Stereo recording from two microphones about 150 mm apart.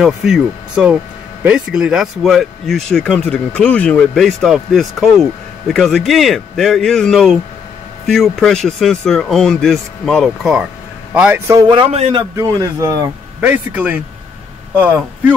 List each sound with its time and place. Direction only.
0.0 s speech: 5° right (ahead or behind)
11.1 s speech: 15° right (ahead or behind)
11.6 s speech: 35° right (ahead or behind)
12.2 s speech: 25° right (ahead or behind)
13.4 s speech: 10° right (ahead or behind)